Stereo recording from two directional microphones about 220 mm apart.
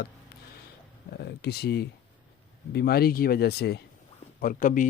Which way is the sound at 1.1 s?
45° left (ahead or behind).